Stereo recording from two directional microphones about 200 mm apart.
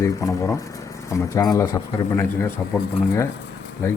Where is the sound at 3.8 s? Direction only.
15° left (ahead or behind).